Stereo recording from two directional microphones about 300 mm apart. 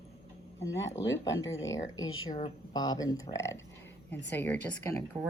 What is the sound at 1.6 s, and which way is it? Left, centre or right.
Speech, centre.